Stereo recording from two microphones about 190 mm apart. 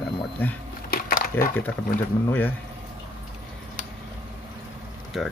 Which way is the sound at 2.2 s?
10° left (ahead or behind).